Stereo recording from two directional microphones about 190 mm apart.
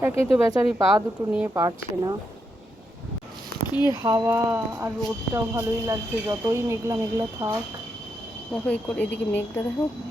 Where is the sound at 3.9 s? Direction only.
15° right (ahead or behind).